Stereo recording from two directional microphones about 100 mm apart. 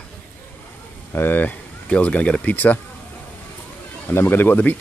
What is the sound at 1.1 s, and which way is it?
Speech, 20° left (ahead or behind).